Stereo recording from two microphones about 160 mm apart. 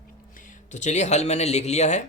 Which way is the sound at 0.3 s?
50° left (ahead or behind).